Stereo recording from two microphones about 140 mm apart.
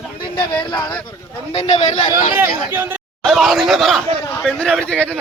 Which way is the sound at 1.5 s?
50° left (ahead or behind).